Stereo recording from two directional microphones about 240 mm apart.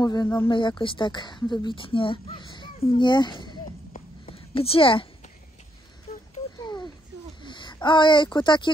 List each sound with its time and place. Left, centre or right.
0.0 s speech: centre
6.6 s a sound: centre
7.4 s speech: centre